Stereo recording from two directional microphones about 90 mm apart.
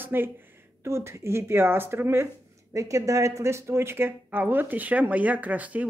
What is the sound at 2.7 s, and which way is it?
Speech, 35° right (ahead or behind).